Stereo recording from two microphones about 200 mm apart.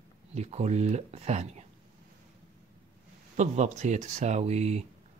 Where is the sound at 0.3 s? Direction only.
35° right (ahead or behind).